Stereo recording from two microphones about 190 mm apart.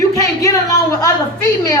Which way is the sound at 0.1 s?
15° left (ahead or behind).